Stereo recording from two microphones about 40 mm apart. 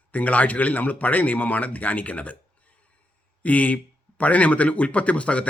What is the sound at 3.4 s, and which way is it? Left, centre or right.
Speech, left.